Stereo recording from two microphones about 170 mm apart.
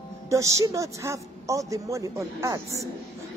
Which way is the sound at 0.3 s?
20° right (ahead or behind).